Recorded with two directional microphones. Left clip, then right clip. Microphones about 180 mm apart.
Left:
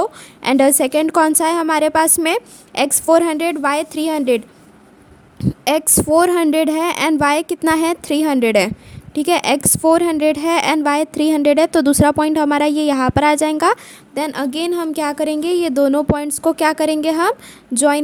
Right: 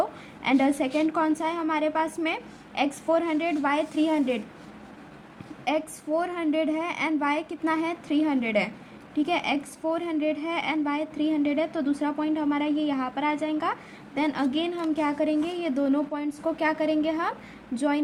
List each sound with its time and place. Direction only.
0.0 s a woman's voice: 90° left
5.6 s a woman's voice: 80° left